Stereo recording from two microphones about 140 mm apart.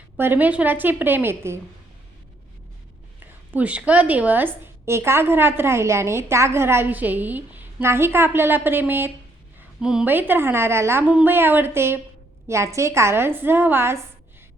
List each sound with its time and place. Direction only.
0.2 s a woman's voice: 15° right (ahead or behind)
3.2 s a woman's voice: 10° right (ahead or behind)